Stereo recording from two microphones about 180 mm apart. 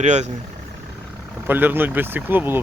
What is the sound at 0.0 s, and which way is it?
Speech, 40° right (ahead or behind).